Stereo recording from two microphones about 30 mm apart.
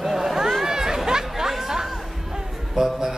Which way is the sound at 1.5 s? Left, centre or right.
Centre.